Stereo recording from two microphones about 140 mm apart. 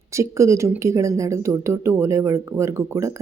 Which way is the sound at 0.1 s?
20° right (ahead or behind).